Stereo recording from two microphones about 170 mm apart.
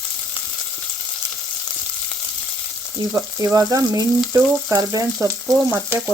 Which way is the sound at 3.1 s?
20° right (ahead or behind).